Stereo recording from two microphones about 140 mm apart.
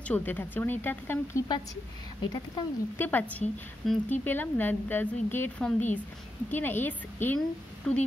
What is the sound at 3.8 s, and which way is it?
Speech, centre (ahead or behind).